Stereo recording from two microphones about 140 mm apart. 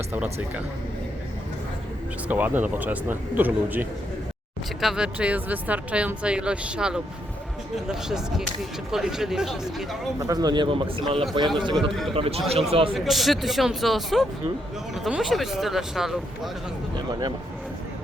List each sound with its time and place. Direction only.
0.1 s speech: 15° right (ahead or behind)
2.2 s speech: 10° right (ahead or behind)
10.2 s a man's voice: 25° right (ahead or behind)
11.8 s speech: centre (ahead or behind)
12.1 s a man's voice: 40° right (ahead or behind)
12.9 s speech: centre (ahead or behind)
16.9 s a man's voice: 30° right (ahead or behind)